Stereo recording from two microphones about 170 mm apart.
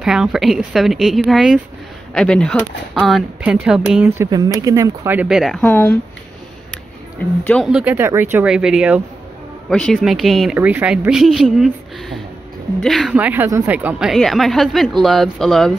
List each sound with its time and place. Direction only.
0.0 s speech: 5° right (ahead or behind)
5.6 s speech: 10° left (ahead or behind)
7.4 s speech: centre (ahead or behind)